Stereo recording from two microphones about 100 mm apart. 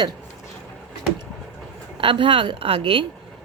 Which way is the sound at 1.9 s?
60° right (ahead or behind).